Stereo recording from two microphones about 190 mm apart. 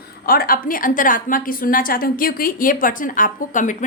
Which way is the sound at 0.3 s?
50° left (ahead or behind).